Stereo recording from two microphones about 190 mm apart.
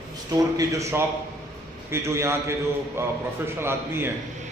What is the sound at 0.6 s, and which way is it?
A man's voice, 15° right (ahead or behind).